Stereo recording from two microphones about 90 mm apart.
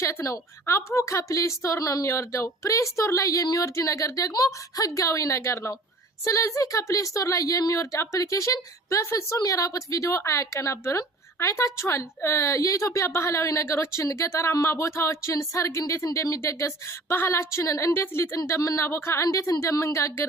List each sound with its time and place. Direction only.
0.0 s a woman's voice: 35° left (ahead or behind)